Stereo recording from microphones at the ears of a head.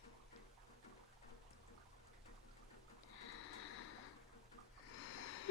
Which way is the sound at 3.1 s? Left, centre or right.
Left.